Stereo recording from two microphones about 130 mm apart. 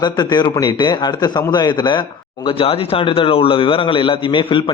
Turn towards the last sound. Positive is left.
turn(degrees=40)  # may be behind; listen again after turning